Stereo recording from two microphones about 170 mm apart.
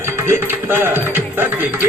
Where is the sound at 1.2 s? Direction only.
10° right (ahead or behind).